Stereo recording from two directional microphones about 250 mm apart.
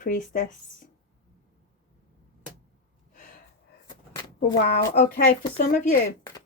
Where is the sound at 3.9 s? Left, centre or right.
Centre.